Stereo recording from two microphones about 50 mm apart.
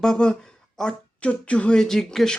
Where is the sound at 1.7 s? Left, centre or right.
Centre.